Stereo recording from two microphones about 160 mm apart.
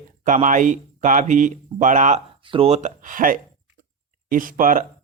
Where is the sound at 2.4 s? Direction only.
35° right (ahead or behind).